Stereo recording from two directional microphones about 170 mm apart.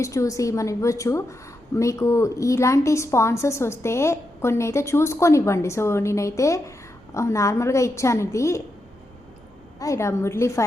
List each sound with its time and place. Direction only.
0.0 s a woman's voice: 20° left (ahead or behind)
9.7 s a woman's voice: 20° left (ahead or behind)